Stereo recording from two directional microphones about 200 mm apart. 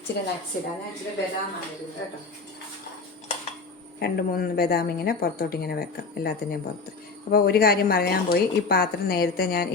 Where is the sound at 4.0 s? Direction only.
50° left (ahead or behind).